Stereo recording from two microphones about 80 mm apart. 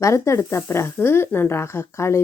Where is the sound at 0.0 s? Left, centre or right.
Left.